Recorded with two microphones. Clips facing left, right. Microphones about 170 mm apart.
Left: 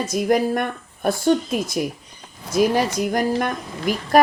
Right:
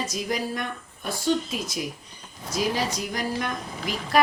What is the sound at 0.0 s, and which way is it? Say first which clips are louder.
A woman's voice: left 9 dB; 55° left (ahead or behind).